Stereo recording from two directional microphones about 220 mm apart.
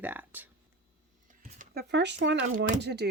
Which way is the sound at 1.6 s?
45° right (ahead or behind).